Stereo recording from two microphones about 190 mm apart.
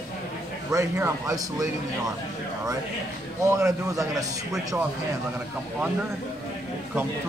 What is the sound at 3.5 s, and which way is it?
Speech, 15° right (ahead or behind).